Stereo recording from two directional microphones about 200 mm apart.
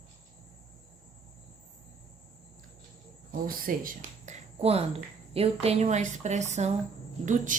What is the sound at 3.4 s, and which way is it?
Speech, 45° right (ahead or behind).